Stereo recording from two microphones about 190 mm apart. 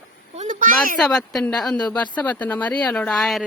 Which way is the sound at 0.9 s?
Centre (ahead or behind).